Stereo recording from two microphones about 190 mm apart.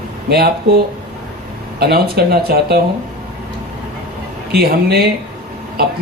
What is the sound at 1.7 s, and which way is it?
Speech, 55° right (ahead or behind).